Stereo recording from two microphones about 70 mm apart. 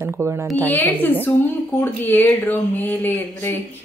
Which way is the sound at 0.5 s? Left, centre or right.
Left.